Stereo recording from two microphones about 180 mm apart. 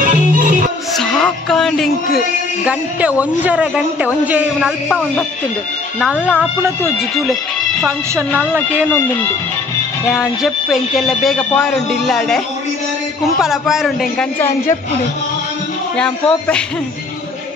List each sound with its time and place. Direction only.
0.0 s music: 45° right (ahead or behind)
0.9 s speech: 5° left (ahead or behind)
8.1 s speech: 15° right (ahead or behind)
10.1 s speech: centre (ahead or behind)
13.4 s speech: centre (ahead or behind)
16.0 s speech: 5° left (ahead or behind)